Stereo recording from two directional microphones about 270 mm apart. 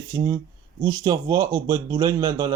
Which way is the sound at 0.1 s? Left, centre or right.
Centre.